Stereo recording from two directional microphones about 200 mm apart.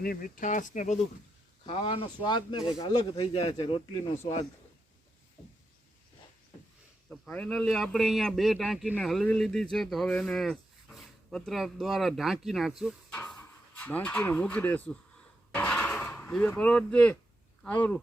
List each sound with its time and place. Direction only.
0.0 s speech: 45° left (ahead or behind)
1.6 s speech: 25° left (ahead or behind)
7.1 s speech: 5° left (ahead or behind)